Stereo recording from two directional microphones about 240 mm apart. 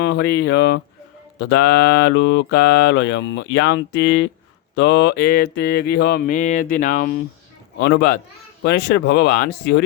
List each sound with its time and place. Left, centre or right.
0.0 s mantra: left
6.0 s speech: left
7.8 s mantra: left
8.6 s speech: left